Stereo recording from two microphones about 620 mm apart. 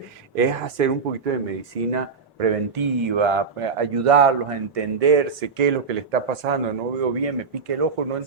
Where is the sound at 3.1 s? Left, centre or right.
Right.